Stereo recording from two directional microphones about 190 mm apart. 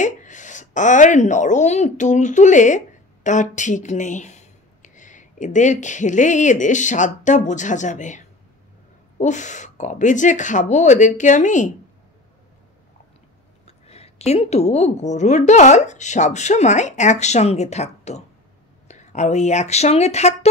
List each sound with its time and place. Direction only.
0.0 s a woman's voice: 40° left (ahead or behind)
13.7 s a woman's voice: 30° left (ahead or behind)